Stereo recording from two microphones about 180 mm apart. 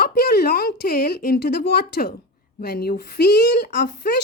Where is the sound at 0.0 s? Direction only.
60° left (ahead or behind).